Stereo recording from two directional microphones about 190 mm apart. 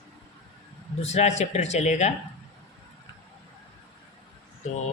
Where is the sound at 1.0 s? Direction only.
35° left (ahead or behind).